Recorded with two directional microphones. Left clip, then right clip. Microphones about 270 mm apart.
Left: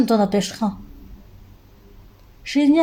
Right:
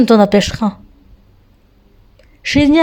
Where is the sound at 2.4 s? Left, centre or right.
Right.